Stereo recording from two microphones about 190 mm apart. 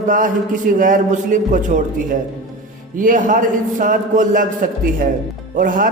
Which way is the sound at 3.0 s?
45° right (ahead or behind).